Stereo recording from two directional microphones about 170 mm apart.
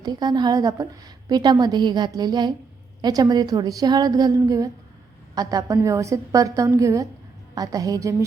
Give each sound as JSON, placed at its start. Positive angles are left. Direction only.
{"t": 0.0, "sound": "a woman's voice", "side_deg": -25}